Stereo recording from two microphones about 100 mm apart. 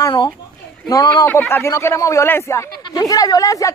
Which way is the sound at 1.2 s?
20° left (ahead or behind).